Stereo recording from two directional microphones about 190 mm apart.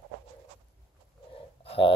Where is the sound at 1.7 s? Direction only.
30° left (ahead or behind).